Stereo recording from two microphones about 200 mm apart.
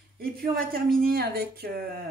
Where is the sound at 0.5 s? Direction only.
50° right (ahead or behind).